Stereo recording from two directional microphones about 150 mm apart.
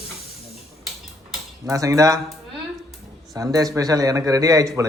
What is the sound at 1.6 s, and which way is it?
Speech, 20° right (ahead or behind).